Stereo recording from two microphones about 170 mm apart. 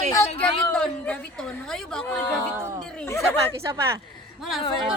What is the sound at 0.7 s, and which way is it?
Speech, 5° left (ahead or behind).